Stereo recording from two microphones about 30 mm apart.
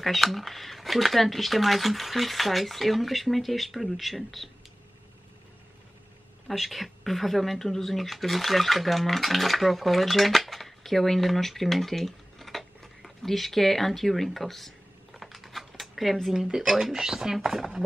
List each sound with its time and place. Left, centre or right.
0.0 s speech: centre
6.5 s speech: centre
15.1 s a sound: centre
16.3 s speech: centre